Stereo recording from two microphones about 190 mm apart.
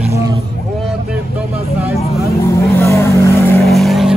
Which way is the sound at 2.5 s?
15° left (ahead or behind).